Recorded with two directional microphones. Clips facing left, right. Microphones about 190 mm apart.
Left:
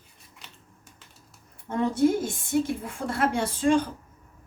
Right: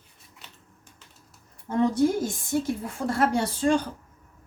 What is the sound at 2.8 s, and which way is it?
Speech, 35° right (ahead or behind).